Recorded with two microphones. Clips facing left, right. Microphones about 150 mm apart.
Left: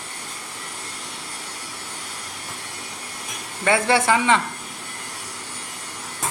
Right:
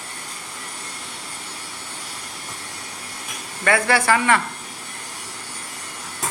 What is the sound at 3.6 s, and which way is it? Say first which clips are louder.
Speech: even; 25° left (ahead or behind).